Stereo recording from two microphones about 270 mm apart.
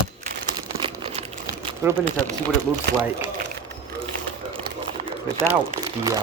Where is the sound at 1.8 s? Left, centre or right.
Centre.